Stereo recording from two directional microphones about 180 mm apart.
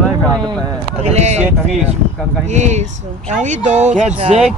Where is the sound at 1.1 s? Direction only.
40° right (ahead or behind).